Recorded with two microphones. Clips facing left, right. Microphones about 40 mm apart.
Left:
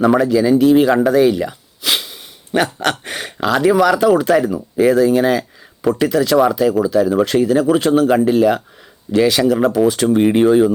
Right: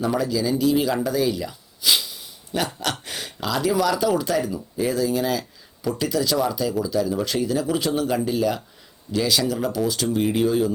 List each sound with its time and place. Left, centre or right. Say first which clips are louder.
0.1 s speech: left 9 dB; left
0.6 s a sound: left 8 dB; left
2.8 s speech: left 8 dB; left